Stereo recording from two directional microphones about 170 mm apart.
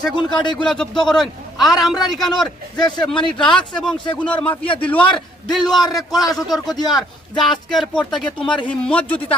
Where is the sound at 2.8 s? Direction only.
25° left (ahead or behind).